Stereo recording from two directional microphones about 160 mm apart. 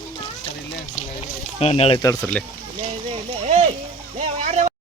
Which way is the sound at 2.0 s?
25° left (ahead or behind).